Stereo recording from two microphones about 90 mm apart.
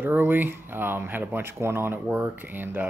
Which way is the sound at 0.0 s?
20° right (ahead or behind).